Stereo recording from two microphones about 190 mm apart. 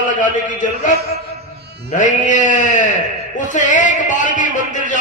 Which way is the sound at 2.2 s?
40° left (ahead or behind).